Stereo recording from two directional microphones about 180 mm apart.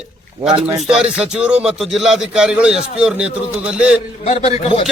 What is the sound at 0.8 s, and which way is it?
A man's voice, 5° right (ahead or behind).